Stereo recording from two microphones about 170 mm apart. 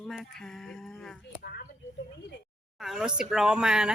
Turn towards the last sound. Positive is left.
turn(degrees=-5)  # may be behind; listen again after turning